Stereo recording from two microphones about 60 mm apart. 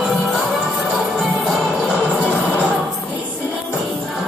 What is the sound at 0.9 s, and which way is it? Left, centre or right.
Music, centre.